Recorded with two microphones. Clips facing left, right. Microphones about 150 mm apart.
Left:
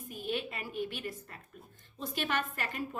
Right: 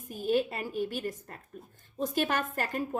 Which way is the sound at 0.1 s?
40° right (ahead or behind).